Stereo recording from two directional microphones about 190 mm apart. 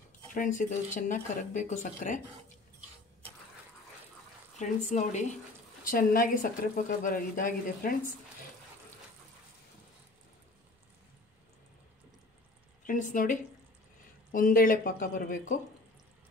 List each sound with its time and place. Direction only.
0.3 s speech: 45° left (ahead or behind)
4.6 s speech: 40° left (ahead or behind)
12.8 s speech: 45° left (ahead or behind)